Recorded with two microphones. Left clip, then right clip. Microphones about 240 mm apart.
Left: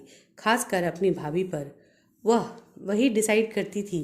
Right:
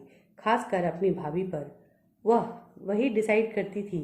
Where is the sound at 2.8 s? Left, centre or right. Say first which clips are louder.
Left 2 dB; left.